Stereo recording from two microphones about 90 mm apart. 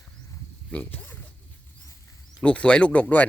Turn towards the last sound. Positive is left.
turn(degrees=15)  # may be behind; listen again after turning